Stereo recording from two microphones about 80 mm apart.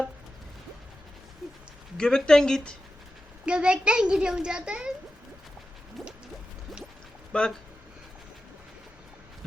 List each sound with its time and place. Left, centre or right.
2.0 s speech: centre
3.4 s a child's voice: centre
6.0 s drip: centre
7.3 s speech: centre